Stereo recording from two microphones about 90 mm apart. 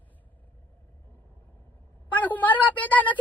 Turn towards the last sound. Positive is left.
turn(degrees=15)  # may be behind; listen again after turning